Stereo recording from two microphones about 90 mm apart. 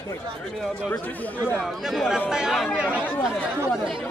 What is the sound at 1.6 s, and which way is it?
Speech, 5° right (ahead or behind).